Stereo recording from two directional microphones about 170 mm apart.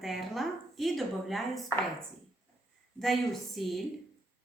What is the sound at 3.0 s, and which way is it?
Speech, centre (ahead or behind).